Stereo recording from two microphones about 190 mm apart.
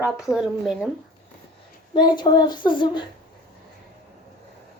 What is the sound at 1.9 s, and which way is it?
Speech, 25° left (ahead or behind).